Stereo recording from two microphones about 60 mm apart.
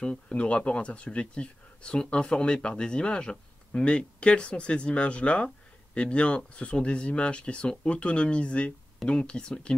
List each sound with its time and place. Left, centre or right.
0.0 s speech: centre